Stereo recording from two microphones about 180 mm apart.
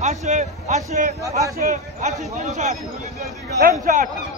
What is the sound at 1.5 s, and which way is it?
Speech, 55° right (ahead or behind).